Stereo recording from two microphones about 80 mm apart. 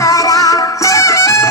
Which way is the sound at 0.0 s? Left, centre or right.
Left.